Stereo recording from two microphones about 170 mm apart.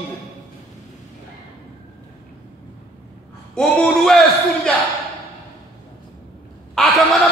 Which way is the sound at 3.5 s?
5° left (ahead or behind).